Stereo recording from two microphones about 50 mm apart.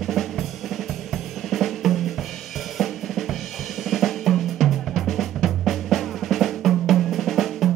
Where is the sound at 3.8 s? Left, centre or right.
Centre.